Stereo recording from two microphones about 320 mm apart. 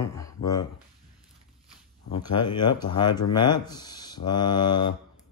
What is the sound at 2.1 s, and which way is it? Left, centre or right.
Speech, centre.